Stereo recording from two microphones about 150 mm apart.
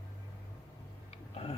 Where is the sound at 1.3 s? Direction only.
40° left (ahead or behind).